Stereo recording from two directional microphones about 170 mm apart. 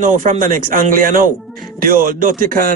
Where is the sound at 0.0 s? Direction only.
50° right (ahead or behind).